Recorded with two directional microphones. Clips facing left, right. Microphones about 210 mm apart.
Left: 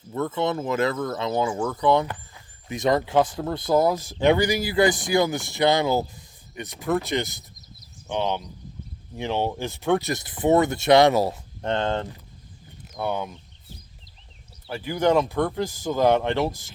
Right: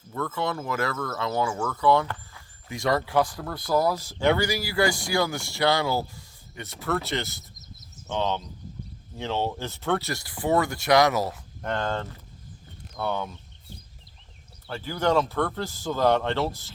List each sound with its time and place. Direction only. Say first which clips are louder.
0.1 s speech: left 4 dB; 20° left (ahead or behind)
14.7 s speech: left 3 dB; 15° left (ahead or behind)